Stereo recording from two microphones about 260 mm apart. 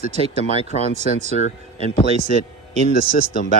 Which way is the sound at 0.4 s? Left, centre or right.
Left.